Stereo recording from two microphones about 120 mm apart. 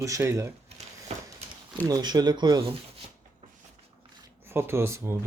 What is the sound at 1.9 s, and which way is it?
Speech, 35° right (ahead or behind).